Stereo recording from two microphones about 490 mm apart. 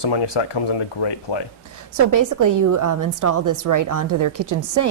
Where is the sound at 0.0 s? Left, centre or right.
Left.